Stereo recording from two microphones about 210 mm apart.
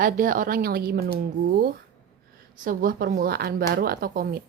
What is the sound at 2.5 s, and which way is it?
Speech, 40° right (ahead or behind).